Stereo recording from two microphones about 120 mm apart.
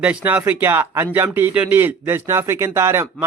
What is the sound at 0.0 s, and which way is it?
Speech, 10° right (ahead or behind).